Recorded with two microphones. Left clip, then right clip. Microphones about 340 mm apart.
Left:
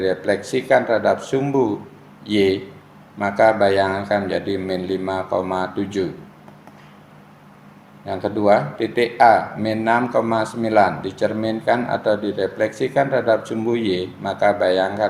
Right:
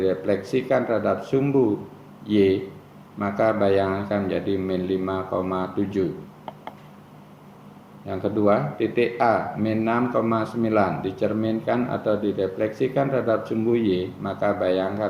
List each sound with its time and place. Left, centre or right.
0.0 s speech: left
8.4 s speech: left